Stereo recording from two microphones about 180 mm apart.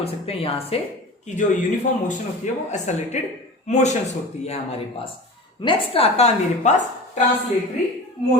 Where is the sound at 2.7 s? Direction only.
40° left (ahead or behind).